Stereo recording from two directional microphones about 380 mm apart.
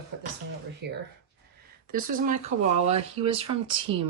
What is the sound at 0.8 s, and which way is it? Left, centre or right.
Speech, right.